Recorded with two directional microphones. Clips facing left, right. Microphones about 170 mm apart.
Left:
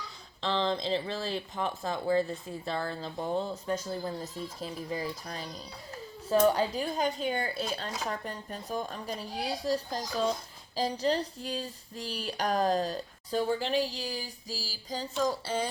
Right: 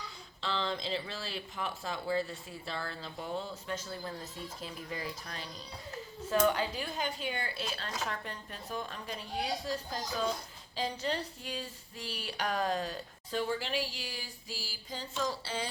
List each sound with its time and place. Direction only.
0.4 s a woman's voice: 35° left (ahead or behind)